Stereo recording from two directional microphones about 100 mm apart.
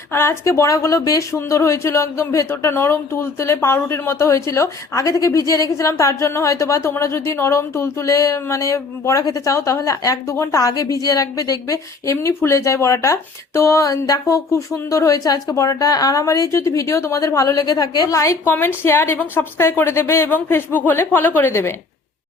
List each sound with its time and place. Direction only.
0.1 s a woman's voice: 25° left (ahead or behind)
18.4 s a woman's voice: 20° left (ahead or behind)